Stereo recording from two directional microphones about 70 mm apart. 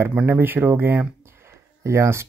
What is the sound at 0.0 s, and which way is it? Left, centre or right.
Speech, right.